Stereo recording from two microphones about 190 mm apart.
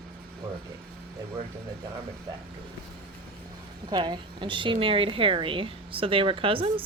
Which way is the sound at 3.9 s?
20° right (ahead or behind).